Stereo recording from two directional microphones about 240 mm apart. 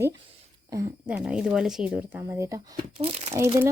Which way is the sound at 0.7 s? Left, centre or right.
Centre.